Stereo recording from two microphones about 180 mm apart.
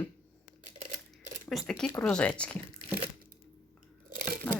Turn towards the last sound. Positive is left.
turn(degrees=-50)  # may be behind; listen again after turning